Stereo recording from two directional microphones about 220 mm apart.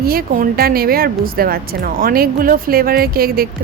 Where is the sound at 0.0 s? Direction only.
45° right (ahead or behind).